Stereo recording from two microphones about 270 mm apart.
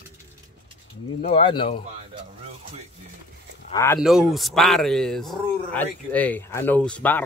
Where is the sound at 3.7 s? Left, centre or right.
Centre.